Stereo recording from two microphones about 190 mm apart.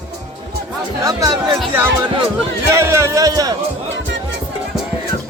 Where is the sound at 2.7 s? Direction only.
15° right (ahead or behind).